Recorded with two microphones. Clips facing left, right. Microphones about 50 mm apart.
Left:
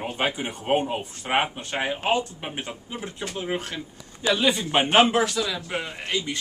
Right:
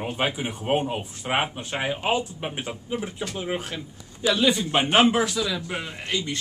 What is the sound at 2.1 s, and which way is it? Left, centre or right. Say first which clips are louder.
A man's voice: left 1 dB; centre.